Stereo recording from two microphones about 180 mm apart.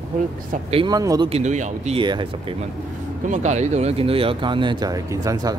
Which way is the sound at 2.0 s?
25° right (ahead or behind).